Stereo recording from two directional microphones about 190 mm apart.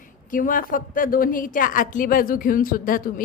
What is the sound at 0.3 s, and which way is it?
A woman's voice, 45° left (ahead or behind).